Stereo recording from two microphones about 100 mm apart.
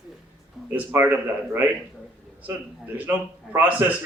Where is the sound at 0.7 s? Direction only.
20° right (ahead or behind).